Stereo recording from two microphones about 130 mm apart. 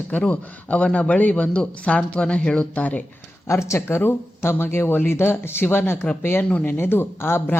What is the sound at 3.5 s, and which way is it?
Speech, 20° left (ahead or behind).